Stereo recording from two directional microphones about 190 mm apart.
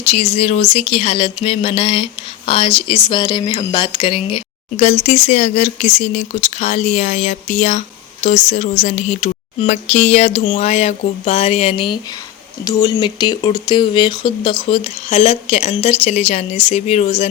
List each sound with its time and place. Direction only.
0.0 s speech: 30° left (ahead or behind)